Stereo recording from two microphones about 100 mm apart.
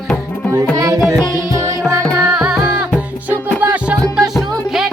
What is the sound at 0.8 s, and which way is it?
Carnatic music, 35° right (ahead or behind).